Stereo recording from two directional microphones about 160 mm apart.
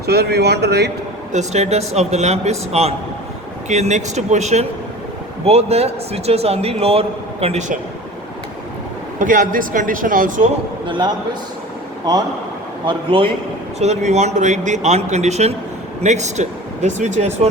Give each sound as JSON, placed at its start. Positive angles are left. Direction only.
{"t": 0.0, "sound": "speech", "side_deg": -90}
{"t": 1.3, "sound": "a man's voice", "side_deg": -45}
{"t": 9.1, "sound": "a man's voice", "side_deg": -60}
{"t": 10.8, "sound": "a man's voice", "side_deg": -30}
{"t": 13.7, "sound": "a man's voice", "side_deg": -45}